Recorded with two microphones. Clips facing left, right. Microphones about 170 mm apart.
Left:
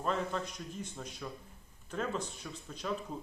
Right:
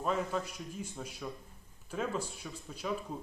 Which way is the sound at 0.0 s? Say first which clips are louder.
Right 1 dB; 5° right (ahead or behind).